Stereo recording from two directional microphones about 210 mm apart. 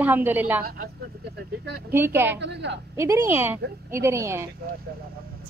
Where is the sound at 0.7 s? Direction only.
50° right (ahead or behind).